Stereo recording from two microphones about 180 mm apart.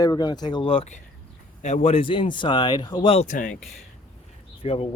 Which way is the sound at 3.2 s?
45° left (ahead or behind).